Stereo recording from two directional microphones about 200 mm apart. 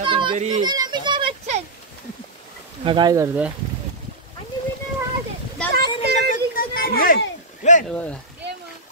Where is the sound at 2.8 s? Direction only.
25° right (ahead or behind).